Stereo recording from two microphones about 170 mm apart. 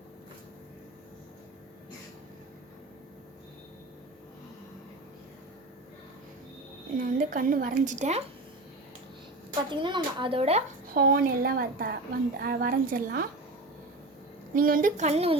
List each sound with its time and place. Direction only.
6.9 s a woman's voice: 50° right (ahead or behind)
9.6 s speech: 30° right (ahead or behind)
10.9 s a woman's voice: 60° right (ahead or behind)
14.5 s a woman's voice: 55° right (ahead or behind); by 15.4 s 35° right (ahead or behind)